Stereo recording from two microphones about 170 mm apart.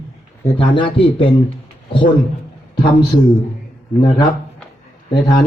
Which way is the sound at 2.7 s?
25° left (ahead or behind).